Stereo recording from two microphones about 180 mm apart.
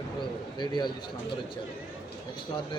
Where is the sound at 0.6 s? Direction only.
25° left (ahead or behind).